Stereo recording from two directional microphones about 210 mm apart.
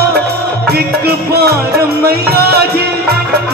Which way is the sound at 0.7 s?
50° right (ahead or behind).